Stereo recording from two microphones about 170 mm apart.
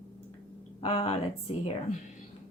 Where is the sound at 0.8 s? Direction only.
40° left (ahead or behind).